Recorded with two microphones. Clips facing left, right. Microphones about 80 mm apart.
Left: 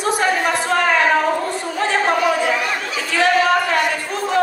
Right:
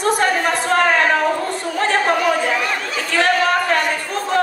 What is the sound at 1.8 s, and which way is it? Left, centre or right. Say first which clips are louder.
Chatter: even; right.